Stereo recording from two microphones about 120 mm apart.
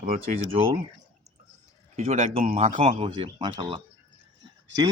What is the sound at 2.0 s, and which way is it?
Speech, 75° right (ahead or behind).